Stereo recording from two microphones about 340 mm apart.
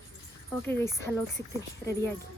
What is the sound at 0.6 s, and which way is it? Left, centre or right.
Speech, centre.